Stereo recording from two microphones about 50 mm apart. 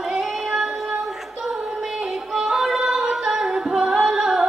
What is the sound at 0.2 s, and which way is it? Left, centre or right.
Child singing, centre.